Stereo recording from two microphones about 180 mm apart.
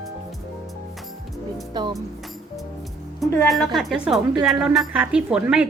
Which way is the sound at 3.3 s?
5° left (ahead or behind).